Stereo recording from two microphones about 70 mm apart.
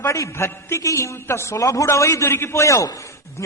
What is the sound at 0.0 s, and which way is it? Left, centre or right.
A man's voice, left.